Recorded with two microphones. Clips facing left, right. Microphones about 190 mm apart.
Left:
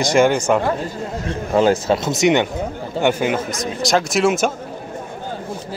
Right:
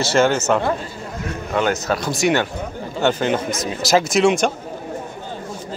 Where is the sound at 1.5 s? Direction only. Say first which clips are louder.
Left 5 dB; 30° left (ahead or behind); by 3.3 s 10° left (ahead or behind).